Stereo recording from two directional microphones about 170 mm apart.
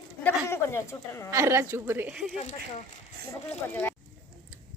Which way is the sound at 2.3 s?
45° left (ahead or behind).